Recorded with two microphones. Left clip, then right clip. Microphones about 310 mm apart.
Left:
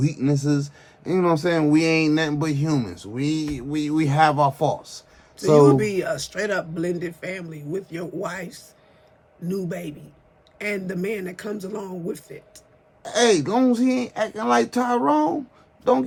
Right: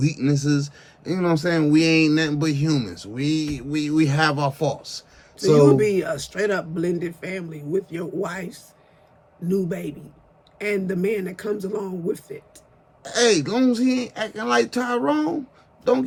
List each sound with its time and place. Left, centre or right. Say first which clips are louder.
0.2 s a man's voice: left 1 dB; centre
5.4 s speech: even; centre
13.0 s a man's voice: even; centre